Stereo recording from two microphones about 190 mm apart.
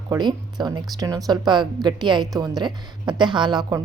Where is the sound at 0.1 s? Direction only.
25° right (ahead or behind).